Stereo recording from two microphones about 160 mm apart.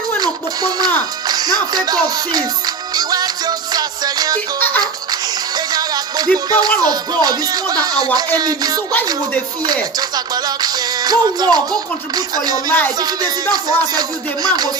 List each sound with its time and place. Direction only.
0.2 s music: 25° right (ahead or behind)
5.5 s music: 25° right (ahead or behind)
10.0 s music: 25° right (ahead or behind)